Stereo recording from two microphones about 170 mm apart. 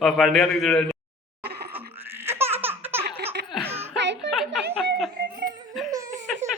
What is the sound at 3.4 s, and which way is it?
Laughter, 75° right (ahead or behind).